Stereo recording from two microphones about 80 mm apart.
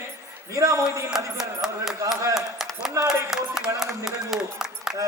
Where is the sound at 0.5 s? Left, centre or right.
Right.